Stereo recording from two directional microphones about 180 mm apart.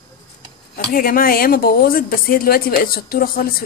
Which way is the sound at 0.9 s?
50° left (ahead or behind).